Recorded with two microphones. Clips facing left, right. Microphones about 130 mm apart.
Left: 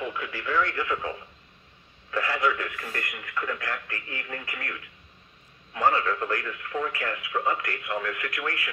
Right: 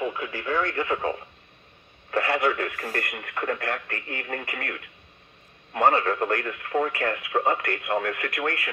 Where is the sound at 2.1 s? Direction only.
60° right (ahead or behind).